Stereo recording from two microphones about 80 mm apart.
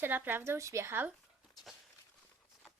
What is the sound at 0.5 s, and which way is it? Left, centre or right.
Speech, right.